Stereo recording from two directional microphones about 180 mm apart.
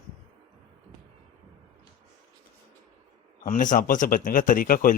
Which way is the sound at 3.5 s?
45° left (ahead or behind).